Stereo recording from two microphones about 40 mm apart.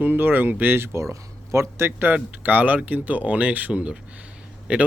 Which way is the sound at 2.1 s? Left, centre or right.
Right.